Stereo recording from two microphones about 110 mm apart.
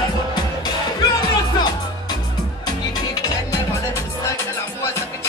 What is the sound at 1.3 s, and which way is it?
Music, 40° left (ahead or behind).